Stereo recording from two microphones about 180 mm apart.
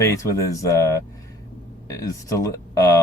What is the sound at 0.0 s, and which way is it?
Speech, 15° left (ahead or behind).